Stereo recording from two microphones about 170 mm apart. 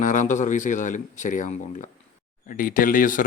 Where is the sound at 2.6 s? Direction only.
55° left (ahead or behind).